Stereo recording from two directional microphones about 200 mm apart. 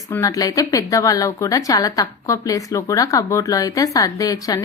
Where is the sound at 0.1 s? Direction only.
15° left (ahead or behind).